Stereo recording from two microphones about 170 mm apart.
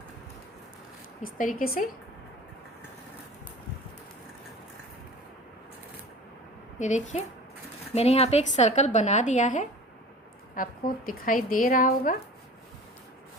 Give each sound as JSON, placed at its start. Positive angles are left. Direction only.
{"t": 1.2, "sound": "a woman's voice", "side_deg": 55}
{"t": 6.7, "sound": "a woman's voice", "side_deg": 45}